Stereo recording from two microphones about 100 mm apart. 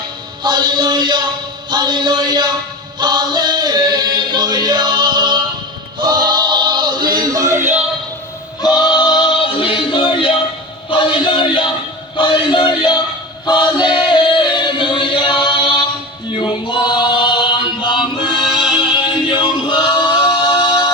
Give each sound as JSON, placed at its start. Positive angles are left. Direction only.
{"t": 0.4, "sound": "chant", "side_deg": -50}
{"t": 6.0, "sound": "choir", "side_deg": -45}
{"t": 8.6, "sound": "singing", "side_deg": 45}
{"t": 10.8, "sound": "music", "side_deg": 55}
{"t": 12.1, "sound": "a sound", "side_deg": 55}
{"t": 16.3, "sound": "a capella", "side_deg": 55}
{"t": 17.8, "sound": "music", "side_deg": 55}
{"t": 18.7, "sound": "choir", "side_deg": 55}